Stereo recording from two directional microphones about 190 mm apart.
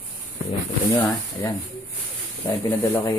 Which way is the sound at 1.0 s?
15° left (ahead or behind).